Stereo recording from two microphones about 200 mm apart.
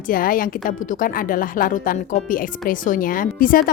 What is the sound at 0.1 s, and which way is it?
A woman's voice, 45° left (ahead or behind).